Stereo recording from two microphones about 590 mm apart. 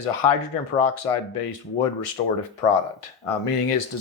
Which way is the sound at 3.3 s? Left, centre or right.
Left.